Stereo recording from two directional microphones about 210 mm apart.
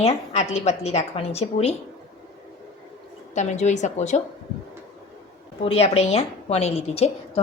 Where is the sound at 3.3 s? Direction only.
35° left (ahead or behind).